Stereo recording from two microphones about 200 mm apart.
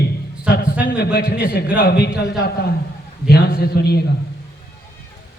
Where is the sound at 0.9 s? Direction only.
55° left (ahead or behind).